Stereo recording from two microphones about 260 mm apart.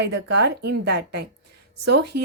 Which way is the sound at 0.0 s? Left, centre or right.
Right.